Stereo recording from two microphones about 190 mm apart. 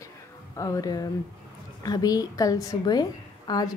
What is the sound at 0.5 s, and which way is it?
A woman's voice, 20° left (ahead or behind).